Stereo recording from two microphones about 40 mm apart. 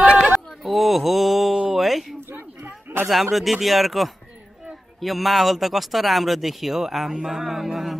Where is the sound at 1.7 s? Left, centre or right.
Centre.